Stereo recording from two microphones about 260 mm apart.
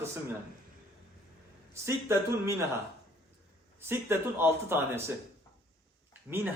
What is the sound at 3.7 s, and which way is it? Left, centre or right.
A man's voice, centre.